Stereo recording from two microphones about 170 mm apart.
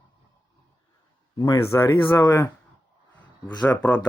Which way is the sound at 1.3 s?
20° left (ahead or behind).